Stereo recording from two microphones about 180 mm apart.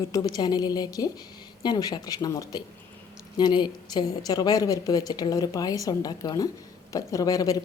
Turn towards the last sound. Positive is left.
turn(degrees=20)  # may be behind; listen again after turning